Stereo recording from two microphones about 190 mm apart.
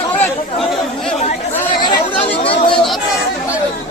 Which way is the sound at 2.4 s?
30° left (ahead or behind).